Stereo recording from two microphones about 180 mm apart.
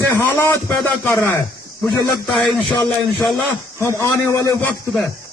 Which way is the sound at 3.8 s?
15° left (ahead or behind).